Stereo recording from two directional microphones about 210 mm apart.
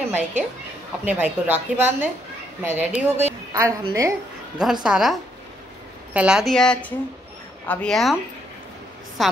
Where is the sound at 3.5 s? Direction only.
15° right (ahead or behind).